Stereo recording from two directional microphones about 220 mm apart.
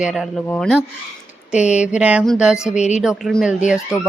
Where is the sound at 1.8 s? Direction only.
5° right (ahead or behind).